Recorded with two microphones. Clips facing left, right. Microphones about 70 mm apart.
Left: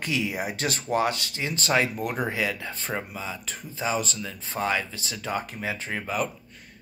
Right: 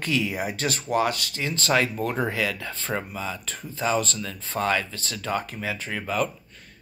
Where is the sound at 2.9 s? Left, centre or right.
Centre.